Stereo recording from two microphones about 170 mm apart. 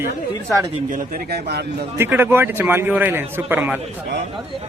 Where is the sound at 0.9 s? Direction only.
55° right (ahead or behind); by 1.6 s 70° right (ahead or behind).